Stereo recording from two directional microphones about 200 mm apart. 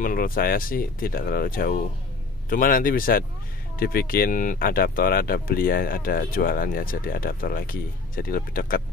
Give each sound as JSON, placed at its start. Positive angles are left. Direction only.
{"t": 0.0, "sound": "speech", "side_deg": 45}